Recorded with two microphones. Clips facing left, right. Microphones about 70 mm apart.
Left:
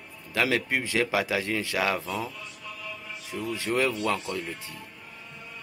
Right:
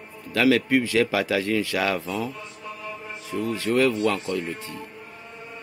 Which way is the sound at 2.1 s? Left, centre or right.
Right.